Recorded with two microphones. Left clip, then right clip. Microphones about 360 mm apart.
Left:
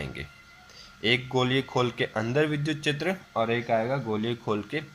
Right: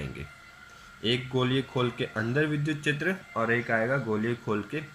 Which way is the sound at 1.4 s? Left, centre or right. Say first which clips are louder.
Left 3 dB; centre.